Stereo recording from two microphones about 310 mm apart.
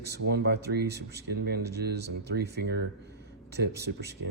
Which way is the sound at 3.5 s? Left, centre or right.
Right.